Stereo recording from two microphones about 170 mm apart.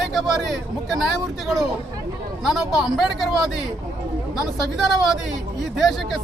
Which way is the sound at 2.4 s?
Centre (ahead or behind).